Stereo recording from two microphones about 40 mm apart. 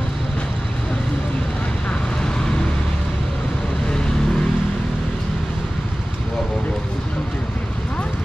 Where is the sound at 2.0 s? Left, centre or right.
Centre.